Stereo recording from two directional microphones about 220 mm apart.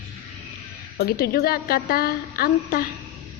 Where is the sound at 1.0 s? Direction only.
45° left (ahead or behind).